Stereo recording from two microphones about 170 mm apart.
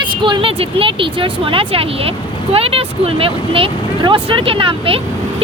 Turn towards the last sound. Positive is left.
turn(degrees=-35)  # may be behind; listen again after turning